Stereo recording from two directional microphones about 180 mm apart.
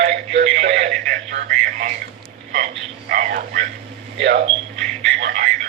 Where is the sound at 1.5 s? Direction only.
45° right (ahead or behind).